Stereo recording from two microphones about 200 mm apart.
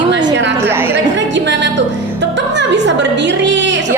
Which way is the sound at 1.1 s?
60° right (ahead or behind).